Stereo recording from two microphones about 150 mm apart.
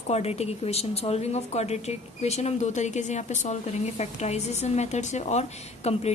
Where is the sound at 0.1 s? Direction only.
45° left (ahead or behind).